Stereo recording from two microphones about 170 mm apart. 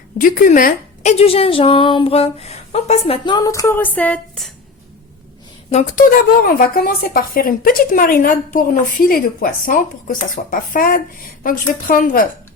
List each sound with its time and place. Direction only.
0.2 s a woman's voice: 55° left (ahead or behind)
1.1 s speech: 35° left (ahead or behind)
3.3 s a sound: 20° left (ahead or behind); by 4.5 s 5° left (ahead or behind)
5.7 s a woman's voice: 50° left (ahead or behind)